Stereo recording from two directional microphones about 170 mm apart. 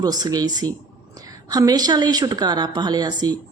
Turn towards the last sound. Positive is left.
turn(degrees=-25)  # may be behind; listen again after turning